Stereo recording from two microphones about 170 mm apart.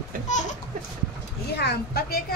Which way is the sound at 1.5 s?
70° left (ahead or behind).